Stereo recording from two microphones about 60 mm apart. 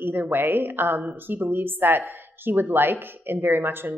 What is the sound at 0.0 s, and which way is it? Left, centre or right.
A woman's voice, right.